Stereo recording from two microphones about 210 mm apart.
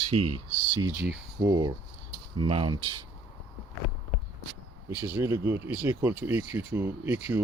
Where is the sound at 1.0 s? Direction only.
10° right (ahead or behind).